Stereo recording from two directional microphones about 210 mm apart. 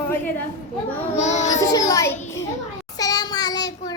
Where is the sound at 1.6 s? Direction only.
15° left (ahead or behind).